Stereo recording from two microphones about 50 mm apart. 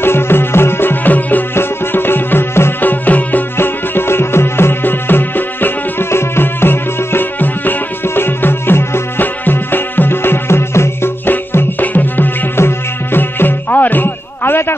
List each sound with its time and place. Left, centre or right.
0.0 s music: left
1.5 s music: left
2.8 s music: left
3.5 s music: left
6.0 s music: left
11.2 s music: left
12.5 s music: left